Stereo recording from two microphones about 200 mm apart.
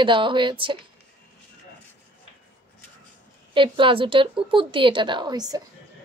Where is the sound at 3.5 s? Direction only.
25° right (ahead or behind).